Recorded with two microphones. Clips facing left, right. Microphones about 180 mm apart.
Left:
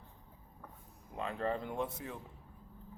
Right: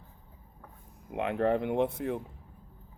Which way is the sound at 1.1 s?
70° right (ahead or behind).